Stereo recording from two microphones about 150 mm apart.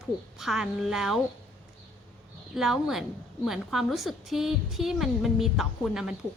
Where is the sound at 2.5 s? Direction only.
Centre (ahead or behind).